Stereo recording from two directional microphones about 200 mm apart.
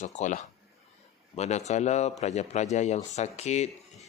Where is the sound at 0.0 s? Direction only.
35° left (ahead or behind).